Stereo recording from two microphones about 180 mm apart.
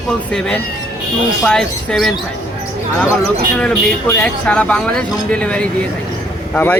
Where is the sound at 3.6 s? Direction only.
10° left (ahead or behind).